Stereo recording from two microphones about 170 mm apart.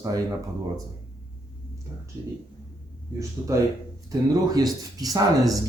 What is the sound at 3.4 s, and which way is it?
Speech, 15° right (ahead or behind).